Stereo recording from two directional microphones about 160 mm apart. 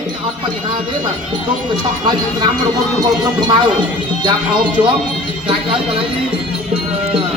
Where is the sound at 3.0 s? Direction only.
25° right (ahead or behind).